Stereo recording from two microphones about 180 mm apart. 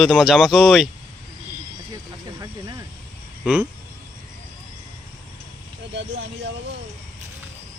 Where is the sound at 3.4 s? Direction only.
5° right (ahead or behind).